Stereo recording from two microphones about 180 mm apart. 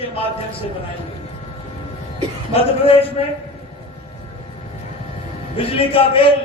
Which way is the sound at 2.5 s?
30° left (ahead or behind).